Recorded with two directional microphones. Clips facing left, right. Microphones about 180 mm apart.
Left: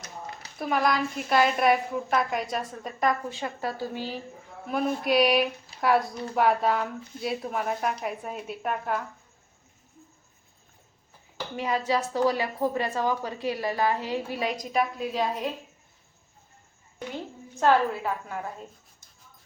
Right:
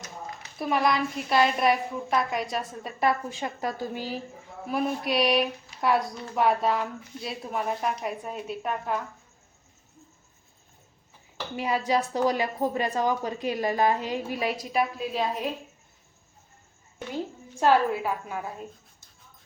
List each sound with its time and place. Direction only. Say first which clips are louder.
0.6 s a woman's voice: right 1 dB; centre (ahead or behind); by 4.1 s 15° right (ahead or behind)
4.7 s a woman's voice: left 2 dB; centre (ahead or behind)
11.5 s a woman's voice: right 1 dB; 10° right (ahead or behind)
14.5 s a woman's voice: even; 5° right (ahead or behind)
17.6 s a woman's voice: right 1 dB; 10° right (ahead or behind)